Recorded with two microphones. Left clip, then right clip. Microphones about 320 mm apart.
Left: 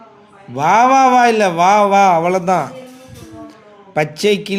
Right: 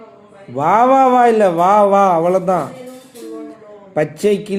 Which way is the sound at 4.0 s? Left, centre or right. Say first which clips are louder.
Even; left.